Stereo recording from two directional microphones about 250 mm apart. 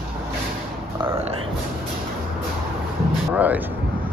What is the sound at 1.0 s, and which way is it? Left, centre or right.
Burping, centre.